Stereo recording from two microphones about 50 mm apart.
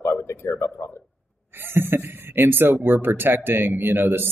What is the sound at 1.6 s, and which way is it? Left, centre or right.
Speech, right.